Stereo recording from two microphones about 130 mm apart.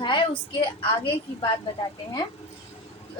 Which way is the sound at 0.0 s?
35° left (ahead or behind).